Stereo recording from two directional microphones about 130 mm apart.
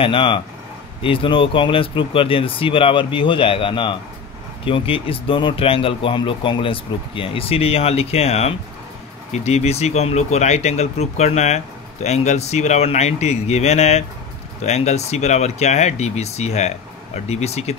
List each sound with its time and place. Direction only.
0.0 s speech: 45° left (ahead or behind)